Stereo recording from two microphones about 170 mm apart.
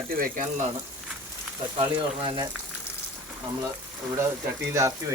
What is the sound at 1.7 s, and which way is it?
Speech, 30° right (ahead or behind).